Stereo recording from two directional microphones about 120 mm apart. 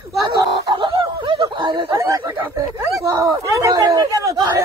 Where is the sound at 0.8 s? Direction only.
40° right (ahead or behind).